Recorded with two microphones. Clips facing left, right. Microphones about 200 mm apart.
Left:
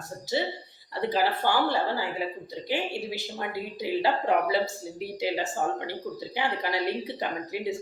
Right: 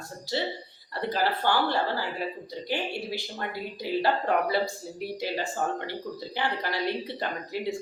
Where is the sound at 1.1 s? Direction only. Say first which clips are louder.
Even; 15° left (ahead or behind).